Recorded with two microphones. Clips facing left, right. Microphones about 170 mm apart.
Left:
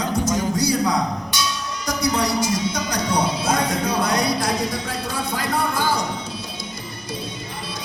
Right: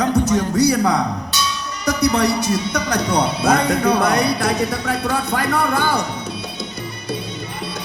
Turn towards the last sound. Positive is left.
turn(degrees=-65)  # may be behind; listen again after turning